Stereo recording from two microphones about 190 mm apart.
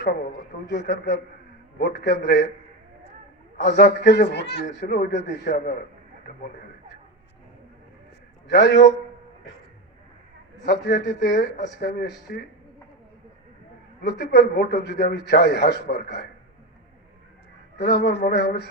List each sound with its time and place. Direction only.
0.0 s a man's voice: 50° left (ahead or behind)
3.6 s a man's voice: 60° left (ahead or behind)
4.6 s speech: 45° left (ahead or behind)
8.4 s a man's voice: 60° left (ahead or behind)
10.7 s a man's voice: 60° left (ahead or behind)
14.2 s a man's voice: 60° left (ahead or behind)
17.7 s a man's voice: 65° left (ahead or behind)